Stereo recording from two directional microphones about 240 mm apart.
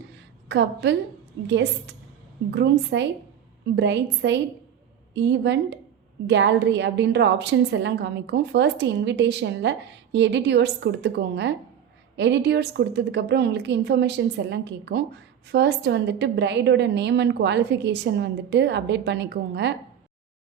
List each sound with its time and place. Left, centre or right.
0.4 s a woman's voice: right